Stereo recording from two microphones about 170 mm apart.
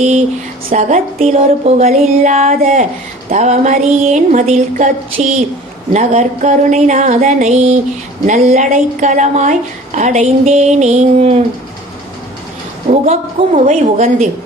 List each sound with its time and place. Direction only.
0.7 s a woman's voice: 45° right (ahead or behind)
12.9 s a woman's voice: 35° right (ahead or behind)